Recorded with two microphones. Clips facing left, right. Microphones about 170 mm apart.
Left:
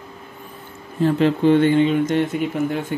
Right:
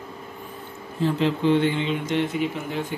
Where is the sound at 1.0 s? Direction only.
50° left (ahead or behind).